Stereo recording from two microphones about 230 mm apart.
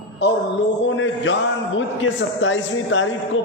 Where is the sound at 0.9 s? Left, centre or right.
Left.